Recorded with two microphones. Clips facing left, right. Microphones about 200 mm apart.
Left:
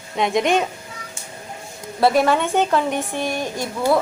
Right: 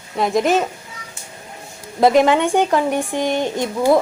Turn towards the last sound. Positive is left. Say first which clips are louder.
# right 5 dB
turn(degrees=-20)  # may be behind; listen again after turning